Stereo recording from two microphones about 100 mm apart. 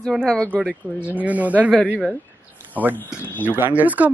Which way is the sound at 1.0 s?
15° right (ahead or behind).